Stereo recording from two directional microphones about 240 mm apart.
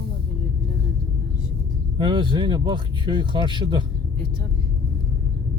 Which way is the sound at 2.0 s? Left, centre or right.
Centre.